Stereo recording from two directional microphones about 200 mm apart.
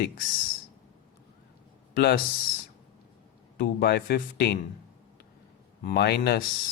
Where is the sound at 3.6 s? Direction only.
50° left (ahead or behind).